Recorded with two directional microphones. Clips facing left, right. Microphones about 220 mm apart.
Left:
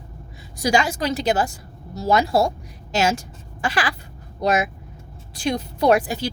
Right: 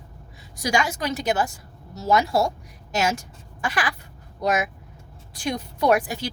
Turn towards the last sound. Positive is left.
turn(degrees=30)  # may be behind; listen again after turning